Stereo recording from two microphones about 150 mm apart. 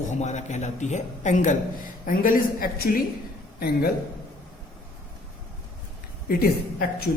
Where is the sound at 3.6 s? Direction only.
90° left.